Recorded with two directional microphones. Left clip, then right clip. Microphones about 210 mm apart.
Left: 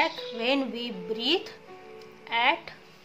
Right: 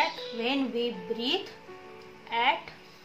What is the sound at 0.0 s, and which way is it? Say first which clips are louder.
A child's voice: left 2 dB; 50° left (ahead or behind).